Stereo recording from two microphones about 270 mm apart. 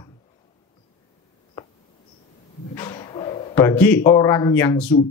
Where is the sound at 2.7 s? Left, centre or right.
Centre.